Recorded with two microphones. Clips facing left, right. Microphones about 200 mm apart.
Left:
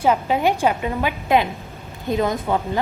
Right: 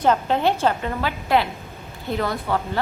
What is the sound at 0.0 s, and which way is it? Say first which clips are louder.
A woman's voice: left 1 dB; 10° left (ahead or behind).